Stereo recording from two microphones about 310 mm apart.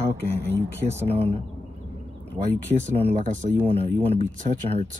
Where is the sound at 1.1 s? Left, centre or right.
Centre.